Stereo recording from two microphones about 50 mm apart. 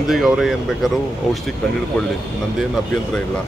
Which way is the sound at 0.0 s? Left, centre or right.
Centre.